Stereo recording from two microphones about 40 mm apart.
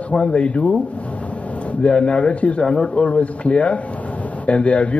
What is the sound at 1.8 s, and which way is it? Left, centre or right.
A man's voice, left.